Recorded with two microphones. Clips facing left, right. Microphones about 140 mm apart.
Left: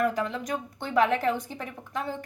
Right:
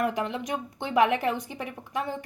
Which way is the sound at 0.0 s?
15° right (ahead or behind).